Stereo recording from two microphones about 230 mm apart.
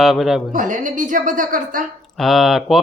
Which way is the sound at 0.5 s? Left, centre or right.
Right.